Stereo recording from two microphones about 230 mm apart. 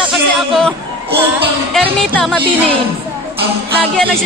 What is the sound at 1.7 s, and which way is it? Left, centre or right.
Speech, centre.